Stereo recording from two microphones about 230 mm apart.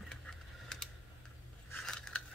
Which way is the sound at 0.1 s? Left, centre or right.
Centre.